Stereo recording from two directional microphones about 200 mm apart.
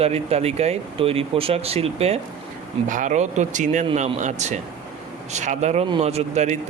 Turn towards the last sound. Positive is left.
turn(degrees=-35)  # may be behind; listen again after turning